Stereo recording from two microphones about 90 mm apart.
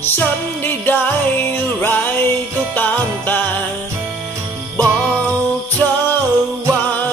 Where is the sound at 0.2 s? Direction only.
20° left (ahead or behind).